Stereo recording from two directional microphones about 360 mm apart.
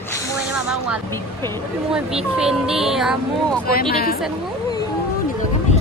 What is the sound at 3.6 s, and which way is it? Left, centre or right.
Speech, left.